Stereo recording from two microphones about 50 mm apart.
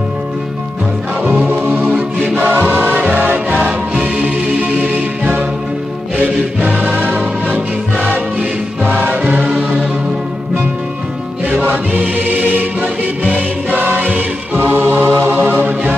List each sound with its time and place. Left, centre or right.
1.2 s music: right
6.6 s music: right
9.4 s music: right
11.4 s music: right
15.2 s mantra: right